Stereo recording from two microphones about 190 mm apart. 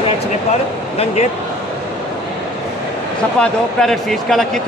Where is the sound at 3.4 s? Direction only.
5° left (ahead or behind).